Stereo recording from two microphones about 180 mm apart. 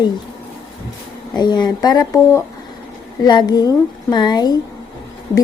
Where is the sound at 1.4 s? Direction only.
25° left (ahead or behind).